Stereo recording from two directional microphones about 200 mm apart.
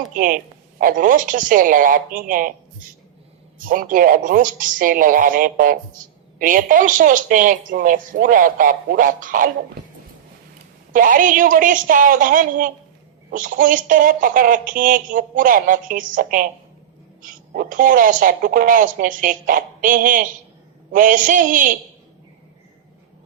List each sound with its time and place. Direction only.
0.1 s speech: 45° right (ahead or behind)
3.7 s speech: 45° right (ahead or behind)
10.9 s speech: 40° right (ahead or behind)